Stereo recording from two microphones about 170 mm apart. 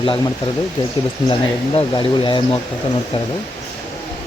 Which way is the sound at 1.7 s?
30° left (ahead or behind).